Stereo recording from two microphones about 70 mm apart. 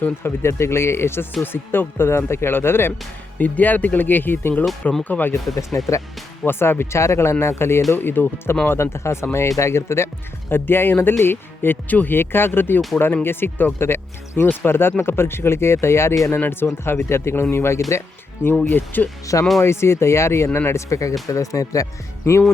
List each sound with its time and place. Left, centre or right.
0.0 s speech: left
3.3 s speech: left
5.5 s speech: left
6.4 s speech: left
7.9 s speech: left
18.6 s speech: left
19.5 s speech: left
22.3 s speech: left